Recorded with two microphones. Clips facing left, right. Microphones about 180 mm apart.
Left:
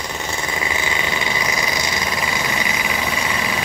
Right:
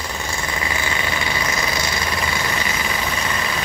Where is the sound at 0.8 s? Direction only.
15° left (ahead or behind).